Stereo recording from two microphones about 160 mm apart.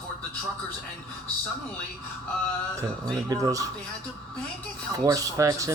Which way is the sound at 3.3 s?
20° right (ahead or behind).